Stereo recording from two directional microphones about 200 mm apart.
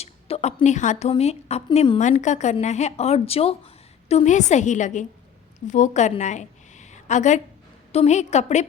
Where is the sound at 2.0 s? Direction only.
35° left (ahead or behind).